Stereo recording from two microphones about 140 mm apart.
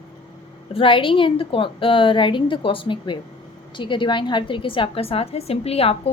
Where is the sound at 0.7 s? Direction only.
40° left (ahead or behind).